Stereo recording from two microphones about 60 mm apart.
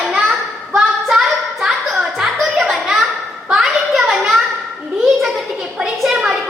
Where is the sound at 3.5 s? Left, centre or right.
Centre.